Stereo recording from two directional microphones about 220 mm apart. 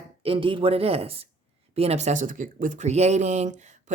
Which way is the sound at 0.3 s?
25° right (ahead or behind).